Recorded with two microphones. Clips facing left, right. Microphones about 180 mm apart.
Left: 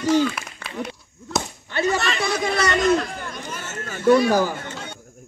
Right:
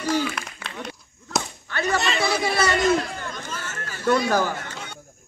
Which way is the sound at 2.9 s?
15° left (ahead or behind).